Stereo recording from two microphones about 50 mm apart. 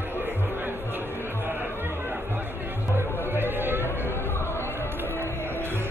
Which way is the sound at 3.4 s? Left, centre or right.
Right.